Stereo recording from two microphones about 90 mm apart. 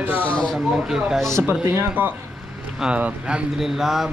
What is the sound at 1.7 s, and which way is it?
Speech, 20° right (ahead or behind).